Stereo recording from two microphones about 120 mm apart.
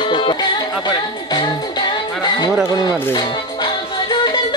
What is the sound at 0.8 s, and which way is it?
Music, 35° left (ahead or behind).